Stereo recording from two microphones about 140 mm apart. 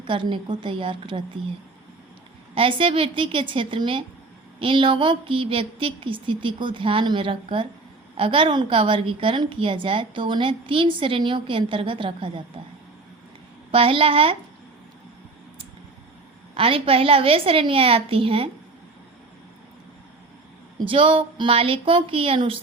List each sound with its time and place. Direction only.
0.0 s a woman's voice: 35° right (ahead or behind)
2.6 s a woman's voice: 40° right (ahead or behind)
13.7 s a woman's voice: 40° right (ahead or behind)
16.6 s a woman's voice: 40° right (ahead or behind)
20.7 s a woman's voice: 40° right (ahead or behind)